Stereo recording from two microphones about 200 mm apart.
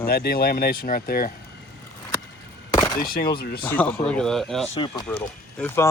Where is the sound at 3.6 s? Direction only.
10° left (ahead or behind).